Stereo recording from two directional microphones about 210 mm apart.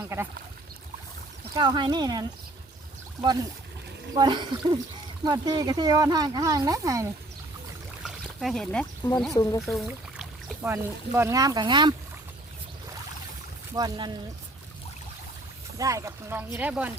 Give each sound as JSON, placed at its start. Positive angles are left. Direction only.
{"t": 0.0, "sound": "speech", "side_deg": -10}
{"t": 1.5, "sound": "speech", "side_deg": -20}
{"t": 4.1, "sound": "speech", "side_deg": -20}
{"t": 8.0, "sound": "a sound", "side_deg": 0}
{"t": 9.3, "sound": "speech", "side_deg": 15}
{"t": 9.6, "sound": "speech", "side_deg": 0}
{"t": 13.7, "sound": "speech", "side_deg": -20}
{"t": 15.8, "sound": "speech", "side_deg": -15}